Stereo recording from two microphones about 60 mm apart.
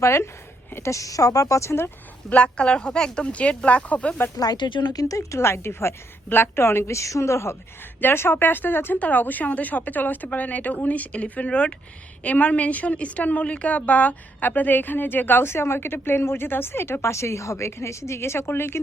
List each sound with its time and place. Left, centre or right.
0.0 s a woman's voice: left
2.3 s speech: centre
4.9 s a woman's voice: left
6.2 s a woman's voice: left
8.0 s a woman's voice: left